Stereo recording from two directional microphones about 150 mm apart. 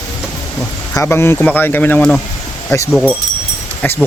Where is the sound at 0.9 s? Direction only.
20° left (ahead or behind).